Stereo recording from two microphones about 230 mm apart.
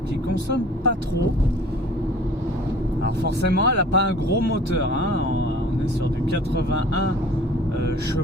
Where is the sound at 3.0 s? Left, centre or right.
Right.